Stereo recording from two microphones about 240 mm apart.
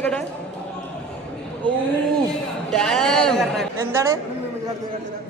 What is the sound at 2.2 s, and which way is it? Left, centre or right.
A man's voice, centre.